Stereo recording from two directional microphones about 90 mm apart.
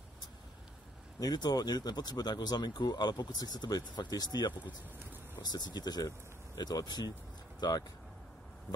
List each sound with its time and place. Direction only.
1.2 s speech: 50° left (ahead or behind)